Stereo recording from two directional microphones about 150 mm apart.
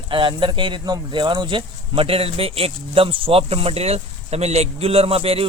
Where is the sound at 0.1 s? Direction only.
35° right (ahead or behind).